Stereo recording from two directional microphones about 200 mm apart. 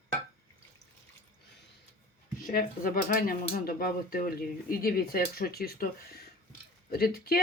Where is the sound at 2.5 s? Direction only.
45° left (ahead or behind).